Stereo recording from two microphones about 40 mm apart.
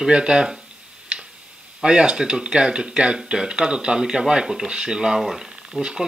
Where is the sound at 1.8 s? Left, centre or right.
Right.